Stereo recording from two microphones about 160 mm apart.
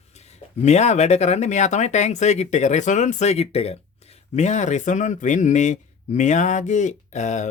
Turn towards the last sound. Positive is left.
turn(degrees=45)  # may be behind; listen again after turning